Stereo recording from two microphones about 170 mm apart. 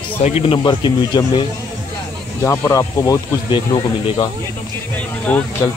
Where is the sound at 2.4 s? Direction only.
15° left (ahead or behind).